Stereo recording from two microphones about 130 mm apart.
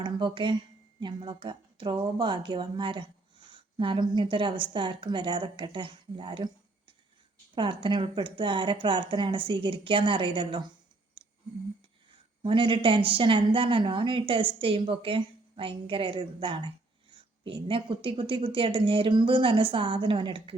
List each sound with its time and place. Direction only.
0.0 s speech: 40° right (ahead or behind)
12.4 s speech: 40° right (ahead or behind)